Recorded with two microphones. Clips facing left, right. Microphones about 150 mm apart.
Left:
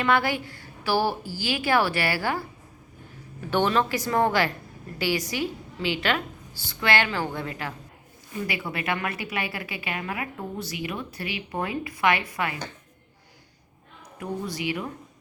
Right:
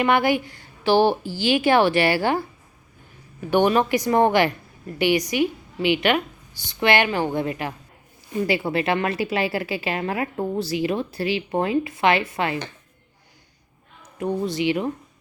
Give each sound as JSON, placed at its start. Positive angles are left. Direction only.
{"t": 0.0, "sound": "a woman's voice", "side_deg": -15}
{"t": 3.5, "sound": "a woman's voice", "side_deg": -15}
{"t": 8.4, "sound": "a woman's voice", "side_deg": -30}
{"t": 14.2, "sound": "a woman's voice", "side_deg": -25}